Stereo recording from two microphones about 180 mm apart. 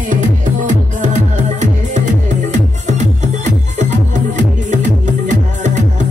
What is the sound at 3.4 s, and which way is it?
Music, 45° right (ahead or behind).